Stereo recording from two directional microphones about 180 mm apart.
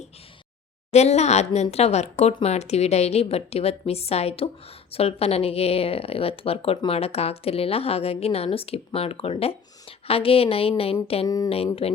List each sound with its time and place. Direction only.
0.9 s speech: 35° left (ahead or behind)
11.3 s speech: 20° left (ahead or behind)
11.5 s speech: 35° left (ahead or behind)